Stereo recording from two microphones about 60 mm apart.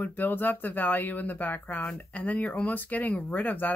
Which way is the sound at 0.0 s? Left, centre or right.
Left.